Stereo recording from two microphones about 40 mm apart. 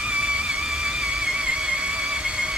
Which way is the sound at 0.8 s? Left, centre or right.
Centre.